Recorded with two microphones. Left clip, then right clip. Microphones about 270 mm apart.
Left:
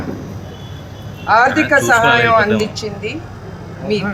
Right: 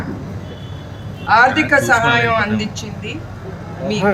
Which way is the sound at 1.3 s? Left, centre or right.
Centre.